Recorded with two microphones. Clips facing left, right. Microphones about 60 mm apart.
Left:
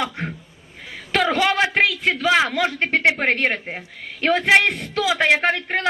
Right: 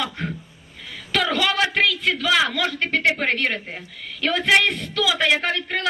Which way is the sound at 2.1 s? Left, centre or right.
Left.